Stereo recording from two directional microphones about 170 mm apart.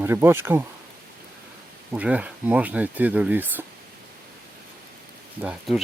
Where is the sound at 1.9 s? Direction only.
10° right (ahead or behind).